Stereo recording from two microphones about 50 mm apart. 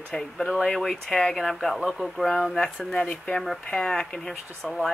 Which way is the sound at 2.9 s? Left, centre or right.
Left.